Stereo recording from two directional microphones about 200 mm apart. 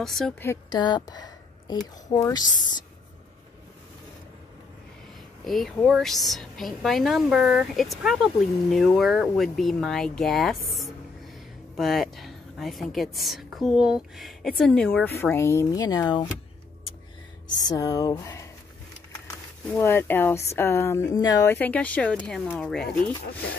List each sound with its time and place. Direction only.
0.0 s a woman's voice: centre (ahead or behind)
0.5 s speech: 20° left (ahead or behind)
5.4 s a woman's voice: centre (ahead or behind); by 16.3 s 20° left (ahead or behind)
17.6 s a woman's voice: 20° left (ahead or behind); by 22.8 s 5° left (ahead or behind)